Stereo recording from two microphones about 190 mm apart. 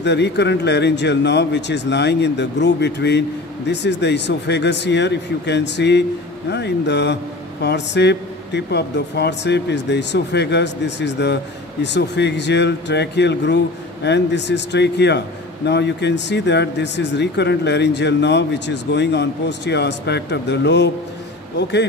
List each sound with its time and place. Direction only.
0.0 s a man's voice: 65° left (ahead or behind)